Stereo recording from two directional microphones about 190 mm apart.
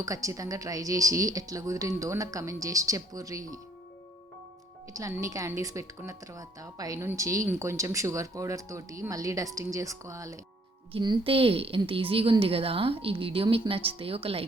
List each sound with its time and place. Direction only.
0.0 s a woman's voice: 15° right (ahead or behind)
4.9 s a woman's voice: 15° right (ahead or behind)